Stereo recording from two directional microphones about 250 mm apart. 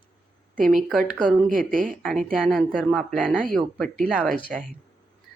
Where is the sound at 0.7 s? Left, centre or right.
Centre.